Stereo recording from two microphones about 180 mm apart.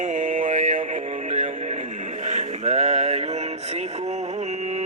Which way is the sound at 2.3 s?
40° right (ahead or behind).